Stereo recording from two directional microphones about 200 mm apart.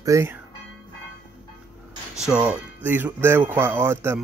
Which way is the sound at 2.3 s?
5° right (ahead or behind).